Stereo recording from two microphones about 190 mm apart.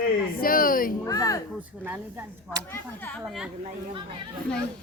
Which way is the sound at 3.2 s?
5° right (ahead or behind).